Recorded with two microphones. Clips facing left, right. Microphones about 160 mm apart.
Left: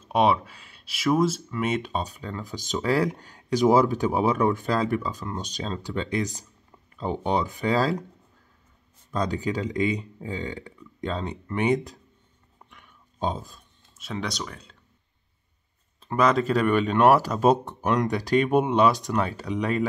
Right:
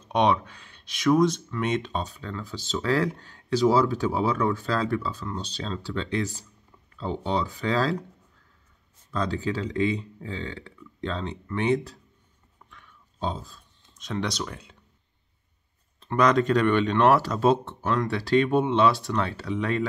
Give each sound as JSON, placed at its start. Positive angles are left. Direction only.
{"t": 0.1, "sound": "speech", "side_deg": 5}
{"t": 9.1, "sound": "speech", "side_deg": 15}
{"t": 12.6, "sound": "a sound", "side_deg": 20}
{"t": 13.9, "sound": "speech", "side_deg": 5}
{"t": 16.0, "sound": "speech", "side_deg": 5}